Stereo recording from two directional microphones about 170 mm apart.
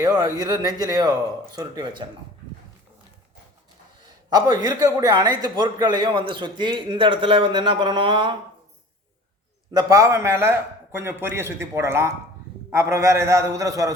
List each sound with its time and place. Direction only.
0.0 s a man's voice: 20° right (ahead or behind)
4.3 s a man's voice: 20° right (ahead or behind)
9.7 s a man's voice: 20° right (ahead or behind)